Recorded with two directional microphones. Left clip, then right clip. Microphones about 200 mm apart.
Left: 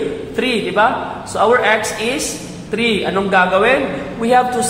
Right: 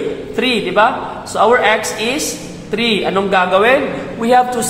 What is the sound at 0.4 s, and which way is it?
A man's voice, 15° right (ahead or behind).